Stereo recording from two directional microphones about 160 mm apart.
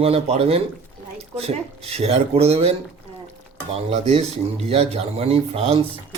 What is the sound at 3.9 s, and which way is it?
Speech, 45° right (ahead or behind).